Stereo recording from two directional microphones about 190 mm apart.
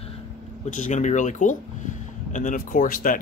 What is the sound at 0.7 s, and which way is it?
Speech, 40° left (ahead or behind).